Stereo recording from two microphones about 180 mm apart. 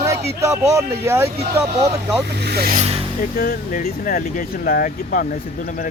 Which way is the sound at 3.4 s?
50° left (ahead or behind).